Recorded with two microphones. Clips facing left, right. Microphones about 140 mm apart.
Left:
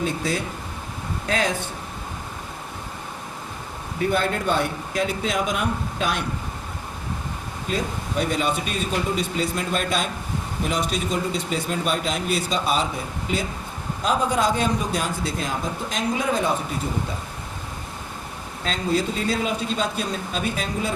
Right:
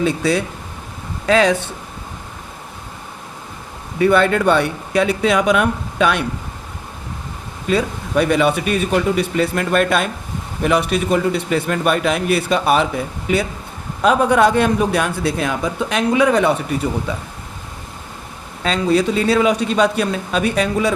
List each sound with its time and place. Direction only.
0.0 s speech: 80° right
3.9 s a man's voice: 80° right
7.7 s a man's voice: 75° right (ahead or behind)
18.6 s a man's voice: 80° right